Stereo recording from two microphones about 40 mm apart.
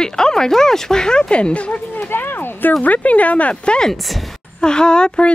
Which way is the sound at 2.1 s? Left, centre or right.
Left.